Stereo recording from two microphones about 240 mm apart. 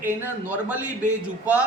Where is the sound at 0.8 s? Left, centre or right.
Right.